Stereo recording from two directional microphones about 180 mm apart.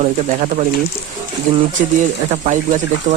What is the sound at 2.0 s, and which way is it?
Speech, 45° right (ahead or behind).